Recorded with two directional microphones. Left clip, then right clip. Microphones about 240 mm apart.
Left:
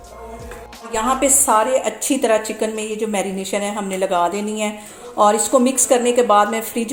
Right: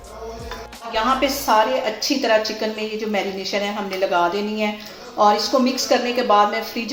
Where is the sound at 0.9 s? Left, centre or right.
Left.